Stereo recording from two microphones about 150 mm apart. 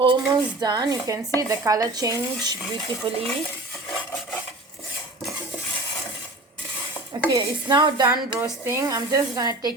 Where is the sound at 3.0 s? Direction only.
35° right (ahead or behind).